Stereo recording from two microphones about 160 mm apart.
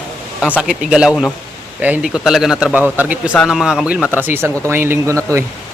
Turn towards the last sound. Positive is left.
turn(degrees=-15)  # may be behind; listen again after turning